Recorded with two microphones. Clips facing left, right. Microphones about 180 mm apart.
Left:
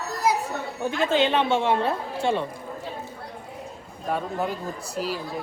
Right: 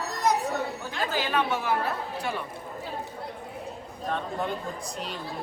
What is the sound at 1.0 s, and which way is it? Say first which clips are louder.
A woman's voice: left 6 dB; 25° left (ahead or behind).